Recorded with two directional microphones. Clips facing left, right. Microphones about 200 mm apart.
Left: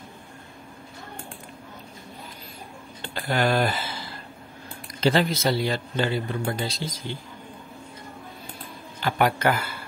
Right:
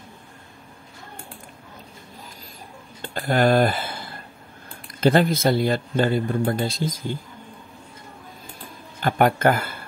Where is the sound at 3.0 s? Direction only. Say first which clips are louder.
Right 4 dB; 50° right (ahead or behind).